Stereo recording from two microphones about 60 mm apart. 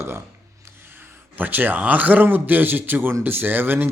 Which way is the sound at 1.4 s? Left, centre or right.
Right.